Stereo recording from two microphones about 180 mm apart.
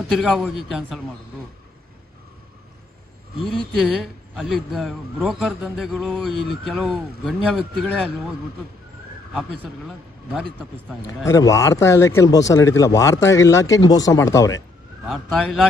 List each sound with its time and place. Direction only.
0.1 s a man's voice: centre (ahead or behind)
3.4 s a man's voice: centre (ahead or behind)
9.3 s a man's voice: centre (ahead or behind)
11.2 s speech: 20° left (ahead or behind)
15.0 s a man's voice: centre (ahead or behind)